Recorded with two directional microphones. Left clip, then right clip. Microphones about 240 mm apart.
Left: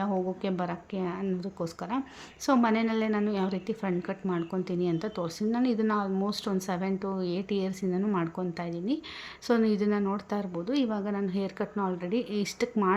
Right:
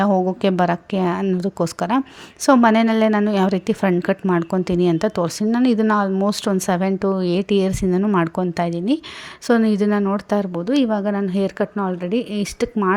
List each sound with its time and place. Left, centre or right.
0.0 s a woman's voice: right